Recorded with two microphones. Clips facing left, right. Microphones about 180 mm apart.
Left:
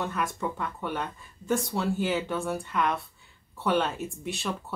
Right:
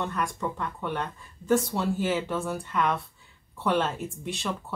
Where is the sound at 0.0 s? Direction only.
5° left (ahead or behind).